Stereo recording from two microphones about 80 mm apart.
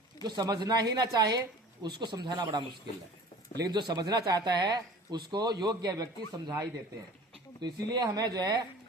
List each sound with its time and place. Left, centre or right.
0.2 s speech: right
3.7 s speech: right
7.6 s speech: right